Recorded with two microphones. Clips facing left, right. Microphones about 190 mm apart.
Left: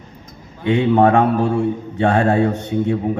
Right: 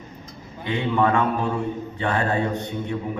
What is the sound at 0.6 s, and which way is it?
A man's voice, 65° left (ahead or behind).